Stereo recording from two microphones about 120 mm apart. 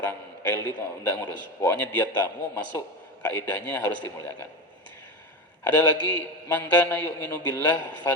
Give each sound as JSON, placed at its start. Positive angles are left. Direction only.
{"t": 0.0, "sound": "a man's voice", "side_deg": 20}
{"t": 5.6, "sound": "a man's voice", "side_deg": 15}